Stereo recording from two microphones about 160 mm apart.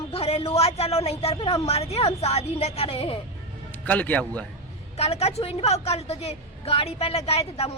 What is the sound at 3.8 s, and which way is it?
Speech, 10° left (ahead or behind).